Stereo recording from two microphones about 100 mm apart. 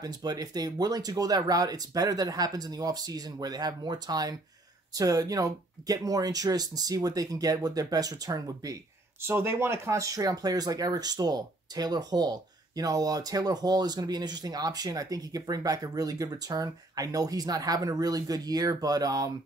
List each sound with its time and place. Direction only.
0.0 s speech: 40° right (ahead or behind)
9.2 s speech: 25° right (ahead or behind)